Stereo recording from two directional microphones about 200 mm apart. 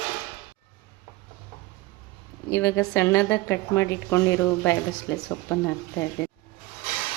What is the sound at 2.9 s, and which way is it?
A woman's voice, 15° left (ahead or behind).